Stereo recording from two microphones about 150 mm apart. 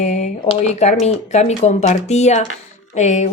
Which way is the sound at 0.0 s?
50° left (ahead or behind).